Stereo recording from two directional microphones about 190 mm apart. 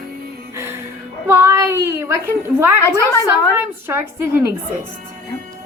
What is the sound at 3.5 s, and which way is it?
Speech, 10° right (ahead or behind).